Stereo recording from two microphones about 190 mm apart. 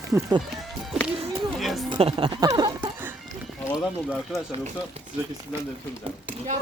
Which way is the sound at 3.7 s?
5° right (ahead or behind).